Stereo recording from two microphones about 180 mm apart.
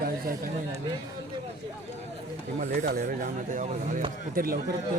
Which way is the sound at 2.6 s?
50° right (ahead or behind).